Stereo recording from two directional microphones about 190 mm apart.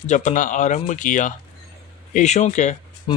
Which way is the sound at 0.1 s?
40° left (ahead or behind).